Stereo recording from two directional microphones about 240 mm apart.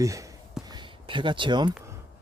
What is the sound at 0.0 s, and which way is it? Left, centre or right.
Speech, centre.